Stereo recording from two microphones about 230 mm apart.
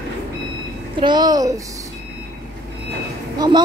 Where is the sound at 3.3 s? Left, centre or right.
Centre.